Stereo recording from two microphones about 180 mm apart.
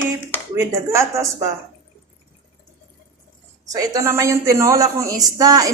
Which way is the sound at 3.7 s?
15° right (ahead or behind).